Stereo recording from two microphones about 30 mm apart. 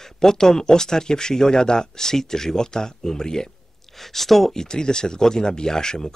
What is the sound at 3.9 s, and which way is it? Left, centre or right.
Speech, centre.